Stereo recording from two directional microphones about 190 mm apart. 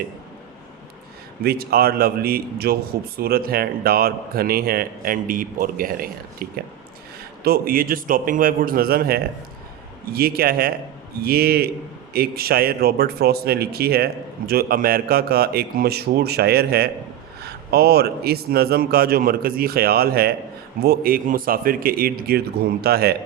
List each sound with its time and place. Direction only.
1.5 s speech: 55° right (ahead or behind)